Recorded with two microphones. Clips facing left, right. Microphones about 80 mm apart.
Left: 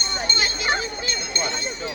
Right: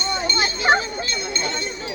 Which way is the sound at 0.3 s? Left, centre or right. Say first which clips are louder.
Right 6 dB; right.